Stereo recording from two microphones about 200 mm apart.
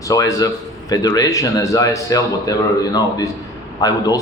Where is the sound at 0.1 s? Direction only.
15° left (ahead or behind).